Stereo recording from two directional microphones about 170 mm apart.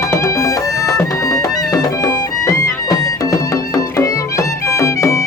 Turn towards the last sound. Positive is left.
turn(degrees=15)  # may be behind; listen again after turning